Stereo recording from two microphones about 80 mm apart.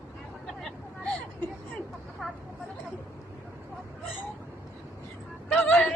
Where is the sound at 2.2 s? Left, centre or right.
Centre.